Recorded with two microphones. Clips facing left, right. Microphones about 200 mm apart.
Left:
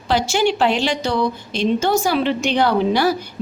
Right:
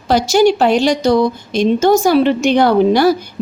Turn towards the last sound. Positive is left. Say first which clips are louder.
# right 6 dB
turn(degrees=-45)  # may be behind; listen again after turning